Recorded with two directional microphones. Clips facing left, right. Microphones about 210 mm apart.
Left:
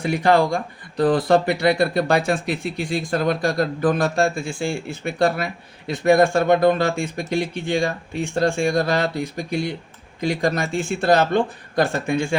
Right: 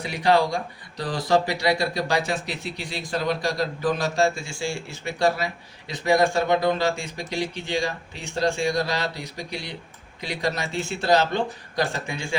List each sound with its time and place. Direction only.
0.0 s speech: 50° left (ahead or behind)